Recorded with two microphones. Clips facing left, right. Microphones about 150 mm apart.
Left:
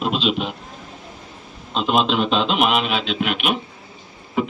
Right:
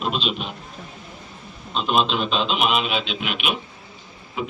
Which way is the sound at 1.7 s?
90° left.